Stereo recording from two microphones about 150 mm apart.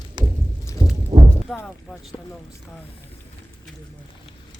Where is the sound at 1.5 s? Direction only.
Centre (ahead or behind).